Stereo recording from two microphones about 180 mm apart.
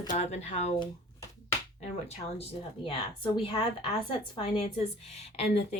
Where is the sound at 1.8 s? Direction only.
35° left (ahead or behind).